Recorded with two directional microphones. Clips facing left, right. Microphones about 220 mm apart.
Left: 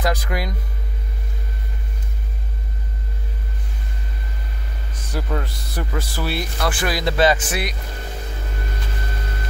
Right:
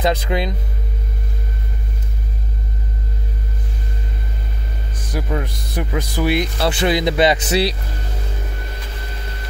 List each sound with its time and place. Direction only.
0.0 s speech: 20° right (ahead or behind)
5.1 s a man's voice: 15° right (ahead or behind)